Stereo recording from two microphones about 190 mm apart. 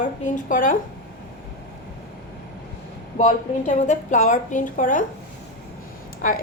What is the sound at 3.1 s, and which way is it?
A woman's voice, 40° left (ahead or behind).